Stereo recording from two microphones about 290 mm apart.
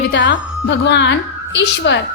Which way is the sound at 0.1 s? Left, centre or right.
Left.